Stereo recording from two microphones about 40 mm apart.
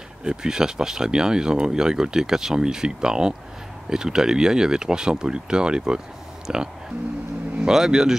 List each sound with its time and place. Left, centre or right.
0.2 s speech: centre